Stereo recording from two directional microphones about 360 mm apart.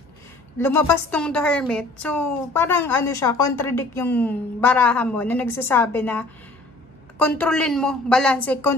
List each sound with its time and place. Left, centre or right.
0.6 s a woman's voice: centre